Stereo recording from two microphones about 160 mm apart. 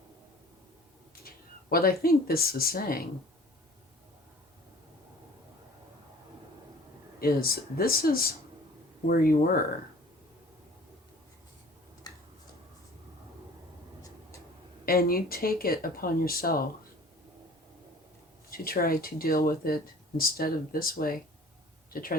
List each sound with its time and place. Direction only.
1.7 s speech: 65° left (ahead or behind)
7.2 s speech: 70° left (ahead or behind)
14.8 s speech: 70° left (ahead or behind)
18.5 s speech: 65° left (ahead or behind)